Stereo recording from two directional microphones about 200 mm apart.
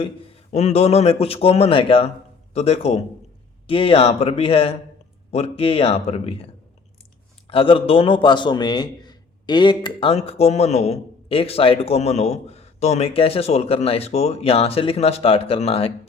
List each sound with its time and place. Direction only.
0.5 s a man's voice: 35° left (ahead or behind)